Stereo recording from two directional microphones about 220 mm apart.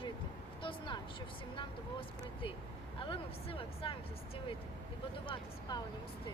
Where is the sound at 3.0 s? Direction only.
25° left (ahead or behind).